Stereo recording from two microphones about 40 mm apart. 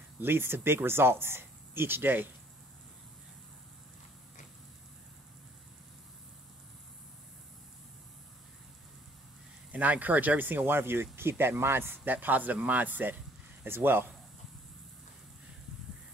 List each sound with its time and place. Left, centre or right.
0.2 s speech: right
0.8 s speech: right
9.7 s speech: right
10.7 s speech: right
13.7 s speech: right